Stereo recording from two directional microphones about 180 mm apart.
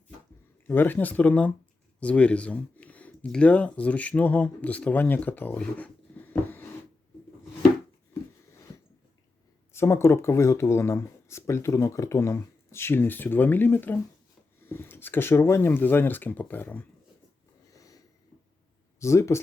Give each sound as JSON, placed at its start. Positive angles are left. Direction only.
{"t": 0.7, "sound": "speech", "side_deg": 10}
{"t": 9.7, "sound": "speech", "side_deg": 15}
{"t": 17.7, "sound": "sniff", "side_deg": 20}
{"t": 18.9, "sound": "speech", "side_deg": 15}